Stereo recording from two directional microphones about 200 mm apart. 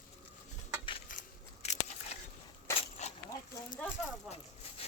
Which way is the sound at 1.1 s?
40° left (ahead or behind).